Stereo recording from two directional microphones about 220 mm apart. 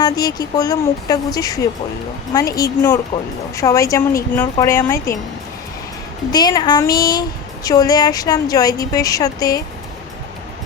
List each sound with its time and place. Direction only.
0.0 s speech: 20° left (ahead or behind)
6.3 s speech: 20° left (ahead or behind)